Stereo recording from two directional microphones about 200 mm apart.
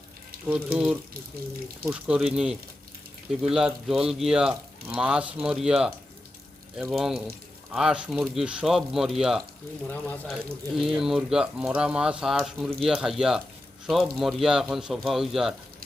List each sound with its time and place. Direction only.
0.4 s speech: 5° right (ahead or behind)
1.1 s speech: 45° right (ahead or behind)
1.8 s speech: 5° right (ahead or behind)